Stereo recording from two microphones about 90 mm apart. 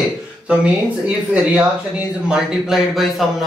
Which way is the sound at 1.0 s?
10° right (ahead or behind).